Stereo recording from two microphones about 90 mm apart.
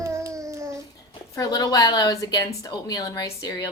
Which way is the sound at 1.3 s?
45° left (ahead or behind).